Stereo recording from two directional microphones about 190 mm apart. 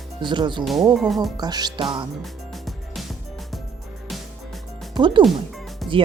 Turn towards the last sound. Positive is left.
turn(degrees=0)  # may be behind; listen again after turning